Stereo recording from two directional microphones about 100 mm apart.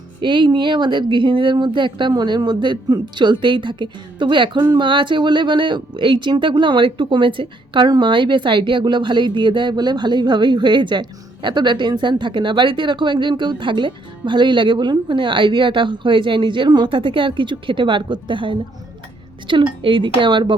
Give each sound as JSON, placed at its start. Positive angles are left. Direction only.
{"t": 0.2, "sound": "speech", "side_deg": -50}